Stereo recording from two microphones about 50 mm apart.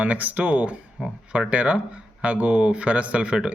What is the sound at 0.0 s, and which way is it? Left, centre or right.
Speech, right.